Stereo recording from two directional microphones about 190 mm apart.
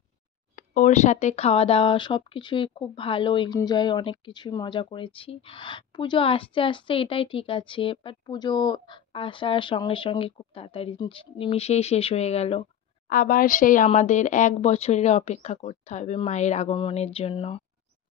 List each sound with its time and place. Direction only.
0.6 s speech: 40° left (ahead or behind)
13.1 s speech: 50° left (ahead or behind); by 17.6 s 30° left (ahead or behind)